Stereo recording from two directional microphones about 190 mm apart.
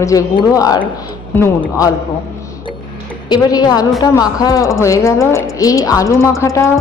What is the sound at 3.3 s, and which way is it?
A woman's voice, 20° left (ahead or behind).